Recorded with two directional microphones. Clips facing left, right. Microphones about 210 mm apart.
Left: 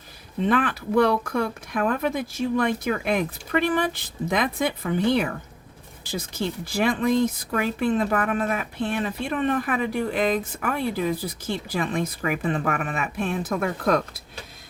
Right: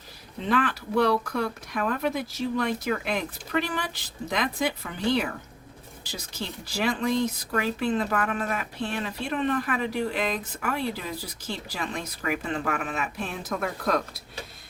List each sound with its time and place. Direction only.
0.4 s speech: 55° left (ahead or behind)